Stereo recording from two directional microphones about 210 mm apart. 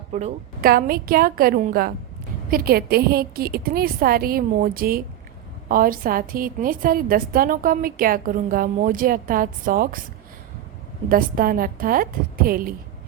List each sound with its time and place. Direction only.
0.1 s a woman's voice: 35° right (ahead or behind)
0.7 s a woman's voice: 45° right (ahead or behind)
11.1 s a woman's voice: 40° right (ahead or behind)